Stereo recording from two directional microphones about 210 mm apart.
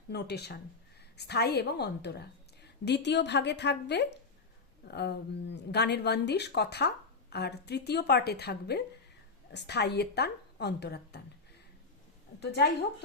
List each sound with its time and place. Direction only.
0.1 s speech: 50° left (ahead or behind)
12.4 s speech: 50° left (ahead or behind)